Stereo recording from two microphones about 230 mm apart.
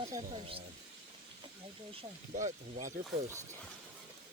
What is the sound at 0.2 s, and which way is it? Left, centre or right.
Speech, right.